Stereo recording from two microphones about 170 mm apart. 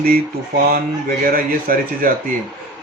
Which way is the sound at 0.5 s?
55° right (ahead or behind).